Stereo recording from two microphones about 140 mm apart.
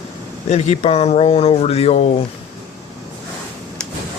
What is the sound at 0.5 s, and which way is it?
Speech, 50° left (ahead or behind).